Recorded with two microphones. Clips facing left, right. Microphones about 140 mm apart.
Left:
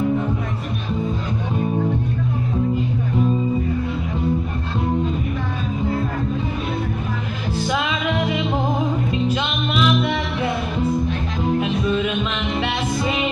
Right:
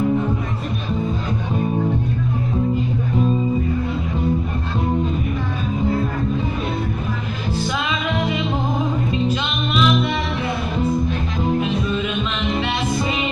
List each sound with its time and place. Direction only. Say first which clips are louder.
7.6 s music: left 3 dB; 55° left (ahead or behind)